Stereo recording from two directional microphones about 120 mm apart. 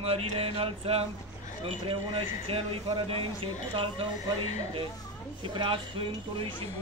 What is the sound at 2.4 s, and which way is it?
Speech, 50° right (ahead or behind).